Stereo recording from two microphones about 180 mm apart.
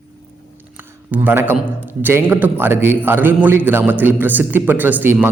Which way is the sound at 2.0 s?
10° right (ahead or behind).